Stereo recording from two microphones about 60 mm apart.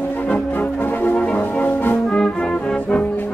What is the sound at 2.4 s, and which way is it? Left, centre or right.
Brass instrument, centre.